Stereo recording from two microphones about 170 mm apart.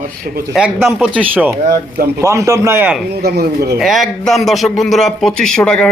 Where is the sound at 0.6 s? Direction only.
10° right (ahead or behind).